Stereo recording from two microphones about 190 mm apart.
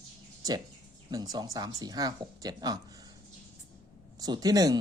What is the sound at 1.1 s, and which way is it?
Speech, 20° right (ahead or behind).